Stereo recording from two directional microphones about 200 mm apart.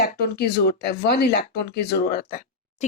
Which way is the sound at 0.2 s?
50° left (ahead or behind).